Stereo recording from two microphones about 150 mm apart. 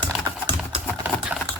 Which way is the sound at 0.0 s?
30° right (ahead or behind).